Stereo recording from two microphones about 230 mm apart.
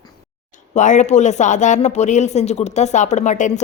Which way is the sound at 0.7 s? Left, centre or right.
Left.